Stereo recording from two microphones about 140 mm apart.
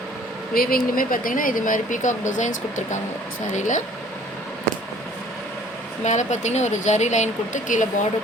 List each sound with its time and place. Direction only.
0.5 s speech: 90° left; by 3.8 s 65° left (ahead or behind)
6.1 s speech: 60° left (ahead or behind)